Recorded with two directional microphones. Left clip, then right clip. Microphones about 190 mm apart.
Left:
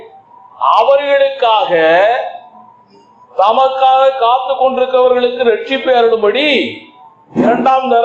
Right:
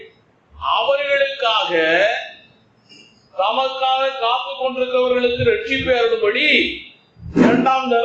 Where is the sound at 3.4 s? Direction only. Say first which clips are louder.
Left 9 dB; 15° left (ahead or behind).